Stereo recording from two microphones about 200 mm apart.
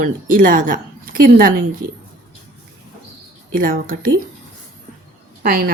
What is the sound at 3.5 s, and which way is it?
Speech, 45° right (ahead or behind).